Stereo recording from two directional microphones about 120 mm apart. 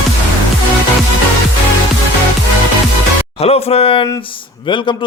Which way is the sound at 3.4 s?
60° left (ahead or behind).